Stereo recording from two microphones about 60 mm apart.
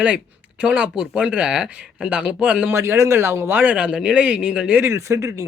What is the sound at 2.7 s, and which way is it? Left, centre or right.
Speech, right.